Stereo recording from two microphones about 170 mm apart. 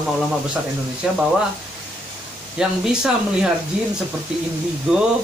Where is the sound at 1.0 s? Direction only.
5° right (ahead or behind).